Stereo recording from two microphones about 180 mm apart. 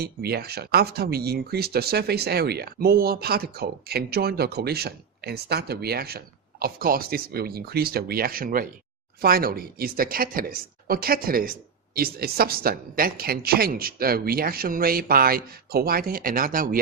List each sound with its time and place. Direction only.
0.0 s speech: 60° right (ahead or behind)